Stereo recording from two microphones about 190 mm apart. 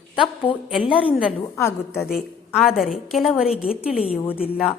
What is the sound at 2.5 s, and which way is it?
Speech, centre (ahead or behind).